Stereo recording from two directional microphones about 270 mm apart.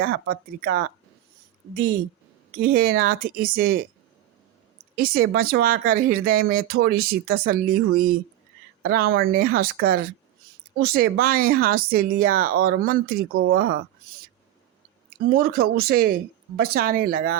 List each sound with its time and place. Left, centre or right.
0.0 s speech: right
2.6 s speech: right
4.9 s speech: right
15.3 s speech: right